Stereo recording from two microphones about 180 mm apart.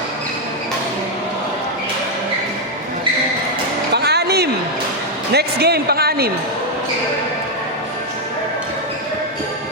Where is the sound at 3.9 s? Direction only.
65° right (ahead or behind).